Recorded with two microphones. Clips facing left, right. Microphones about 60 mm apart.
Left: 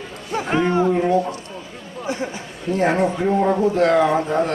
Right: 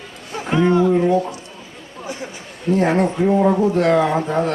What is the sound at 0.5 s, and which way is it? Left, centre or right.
Speech, left.